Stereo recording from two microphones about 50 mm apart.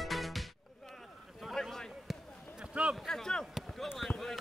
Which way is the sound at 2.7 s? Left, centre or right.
Right.